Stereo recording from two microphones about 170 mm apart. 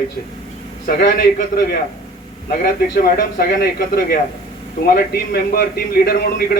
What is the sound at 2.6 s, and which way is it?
A man's voice, 60° left (ahead or behind).